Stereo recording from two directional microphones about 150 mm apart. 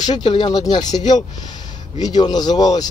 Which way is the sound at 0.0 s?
30° left (ahead or behind).